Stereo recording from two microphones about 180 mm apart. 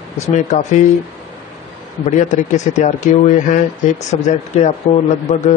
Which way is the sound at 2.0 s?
40° left (ahead or behind).